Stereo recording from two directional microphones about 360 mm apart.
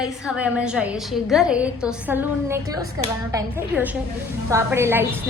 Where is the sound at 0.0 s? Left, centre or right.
Centre.